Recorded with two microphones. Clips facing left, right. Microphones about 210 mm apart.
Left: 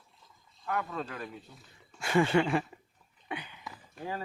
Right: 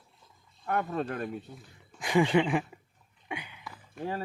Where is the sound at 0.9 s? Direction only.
50° right (ahead or behind).